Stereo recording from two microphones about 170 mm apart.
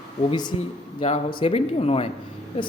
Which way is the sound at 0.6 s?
35° left (ahead or behind).